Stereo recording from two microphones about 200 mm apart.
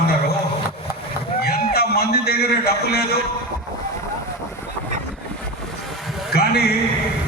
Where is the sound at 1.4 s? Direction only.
50° left (ahead or behind).